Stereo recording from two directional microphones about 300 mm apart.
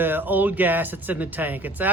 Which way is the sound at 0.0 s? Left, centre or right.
Centre.